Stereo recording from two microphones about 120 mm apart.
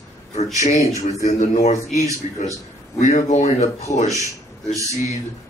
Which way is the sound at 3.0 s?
85° left.